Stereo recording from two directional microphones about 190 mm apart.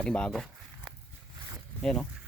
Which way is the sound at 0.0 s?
5° left (ahead or behind).